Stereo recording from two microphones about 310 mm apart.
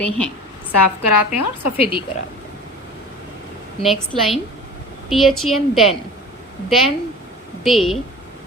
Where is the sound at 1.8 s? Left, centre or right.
Centre.